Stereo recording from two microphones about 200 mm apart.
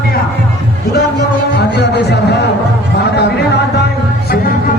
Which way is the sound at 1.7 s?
55° left (ahead or behind).